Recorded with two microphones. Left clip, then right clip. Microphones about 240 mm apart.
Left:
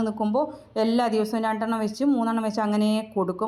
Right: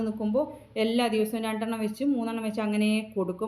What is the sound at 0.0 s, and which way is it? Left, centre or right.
A woman's voice, left.